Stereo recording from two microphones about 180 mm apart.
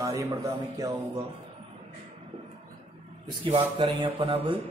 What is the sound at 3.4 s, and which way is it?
A man's voice, 30° right (ahead or behind).